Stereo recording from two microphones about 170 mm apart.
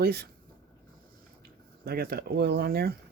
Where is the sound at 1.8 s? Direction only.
65° right (ahead or behind).